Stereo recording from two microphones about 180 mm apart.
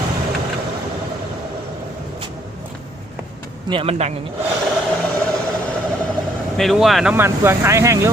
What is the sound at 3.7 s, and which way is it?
Speech, 30° right (ahead or behind).